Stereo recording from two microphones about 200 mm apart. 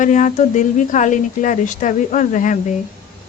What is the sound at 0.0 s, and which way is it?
Speech, 40° left (ahead or behind).